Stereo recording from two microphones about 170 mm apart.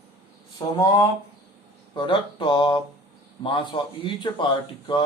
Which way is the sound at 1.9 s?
30° left (ahead or behind).